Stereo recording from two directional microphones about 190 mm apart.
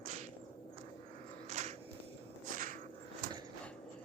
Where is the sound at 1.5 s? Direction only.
35° right (ahead or behind).